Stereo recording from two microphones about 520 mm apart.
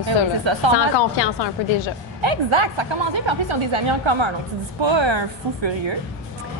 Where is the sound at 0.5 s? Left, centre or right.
Right.